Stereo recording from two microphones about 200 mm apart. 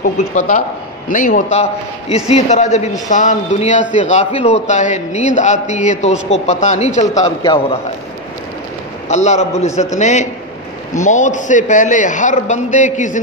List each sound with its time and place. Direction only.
0.0 s a man's voice: 35° left (ahead or behind)
7.2 s a man's voice: 20° left (ahead or behind)
9.1 s a man's voice: 35° left (ahead or behind)